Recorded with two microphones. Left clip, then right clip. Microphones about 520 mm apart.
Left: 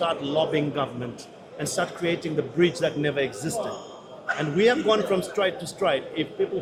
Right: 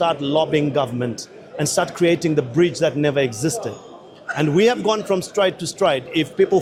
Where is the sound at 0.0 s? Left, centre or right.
Right.